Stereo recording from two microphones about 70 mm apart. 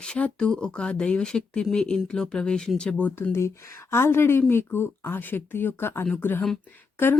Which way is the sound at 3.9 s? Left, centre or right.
Left.